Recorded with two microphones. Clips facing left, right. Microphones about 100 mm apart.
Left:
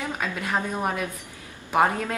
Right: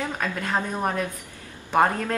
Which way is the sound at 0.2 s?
10° left (ahead or behind).